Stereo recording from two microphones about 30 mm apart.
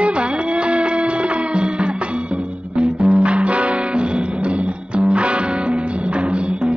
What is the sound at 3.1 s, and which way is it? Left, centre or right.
Music, right.